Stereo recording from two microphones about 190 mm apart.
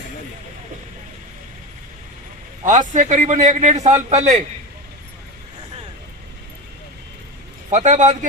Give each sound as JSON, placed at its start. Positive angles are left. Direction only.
{"t": 2.6, "sound": "a man's voice", "side_deg": -40}
{"t": 7.7, "sound": "a man's voice", "side_deg": -40}